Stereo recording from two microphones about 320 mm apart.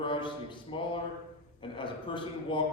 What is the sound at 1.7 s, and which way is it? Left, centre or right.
Speech, centre.